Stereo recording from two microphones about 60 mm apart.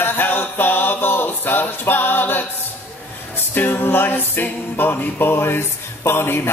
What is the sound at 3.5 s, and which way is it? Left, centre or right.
A capella, left.